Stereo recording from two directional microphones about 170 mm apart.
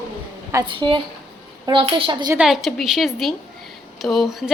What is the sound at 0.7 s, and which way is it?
A woman's voice, 30° right (ahead or behind).